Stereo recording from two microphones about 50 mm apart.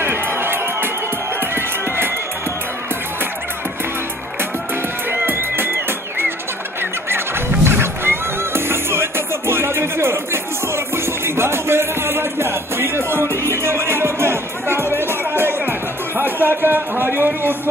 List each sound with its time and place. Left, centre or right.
0.0 s music: right
5.1 s music: right
16.2 s a sound: right